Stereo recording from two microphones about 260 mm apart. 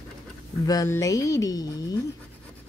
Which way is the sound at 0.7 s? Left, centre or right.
Centre.